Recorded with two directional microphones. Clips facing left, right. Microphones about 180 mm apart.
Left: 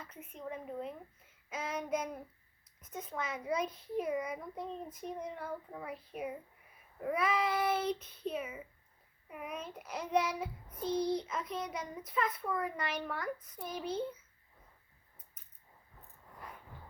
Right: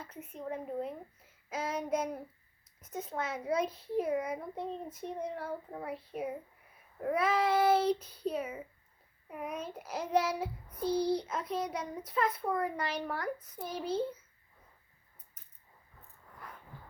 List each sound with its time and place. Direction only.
0.3 s child singing: 30° right (ahead or behind)
1.5 s a child's voice: 30° right (ahead or behind)
7.1 s child singing: 25° right (ahead or behind)
9.4 s a child's voice: 30° right (ahead or behind)